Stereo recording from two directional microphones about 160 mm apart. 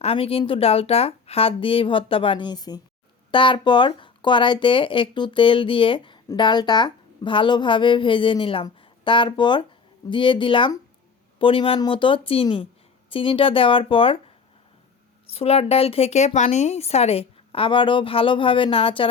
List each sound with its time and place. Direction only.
0.0 s a woman's voice: 35° left (ahead or behind)
15.3 s a woman's voice: 40° left (ahead or behind)